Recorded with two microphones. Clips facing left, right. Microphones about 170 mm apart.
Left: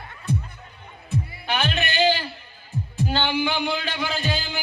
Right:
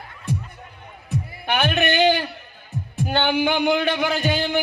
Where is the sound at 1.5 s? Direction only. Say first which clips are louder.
Right 5 dB; 55° right (ahead or behind).